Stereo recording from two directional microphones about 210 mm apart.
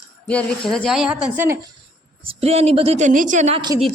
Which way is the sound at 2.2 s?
30° right (ahead or behind).